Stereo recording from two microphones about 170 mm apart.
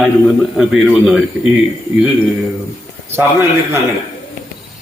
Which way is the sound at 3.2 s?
15° right (ahead or behind).